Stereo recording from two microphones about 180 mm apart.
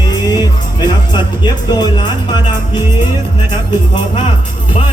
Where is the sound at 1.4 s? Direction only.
25° left (ahead or behind).